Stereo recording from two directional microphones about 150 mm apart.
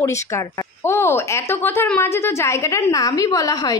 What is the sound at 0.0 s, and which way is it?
A woman's voice, 20° left (ahead or behind).